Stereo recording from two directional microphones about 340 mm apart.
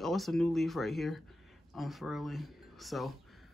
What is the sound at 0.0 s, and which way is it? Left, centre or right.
Speech, centre.